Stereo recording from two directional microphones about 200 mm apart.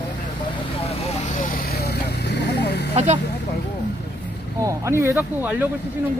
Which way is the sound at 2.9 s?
35° right (ahead or behind).